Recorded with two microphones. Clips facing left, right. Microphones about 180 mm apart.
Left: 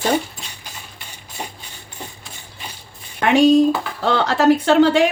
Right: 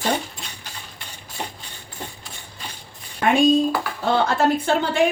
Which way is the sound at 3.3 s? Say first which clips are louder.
Left 4 dB; 80° left.